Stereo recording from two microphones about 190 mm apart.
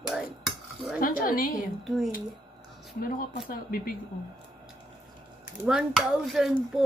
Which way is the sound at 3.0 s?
50° left (ahead or behind).